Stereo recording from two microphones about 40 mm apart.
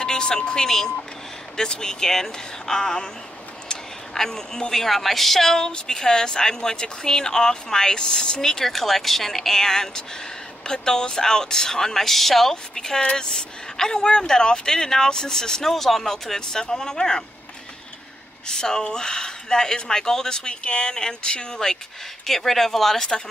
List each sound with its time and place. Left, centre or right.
0.0 s speech: centre
3.6 s a sound: centre
4.8 s a woman's voice: centre
5.6 s speech: centre
18.5 s speech: centre
22.2 s speech: centre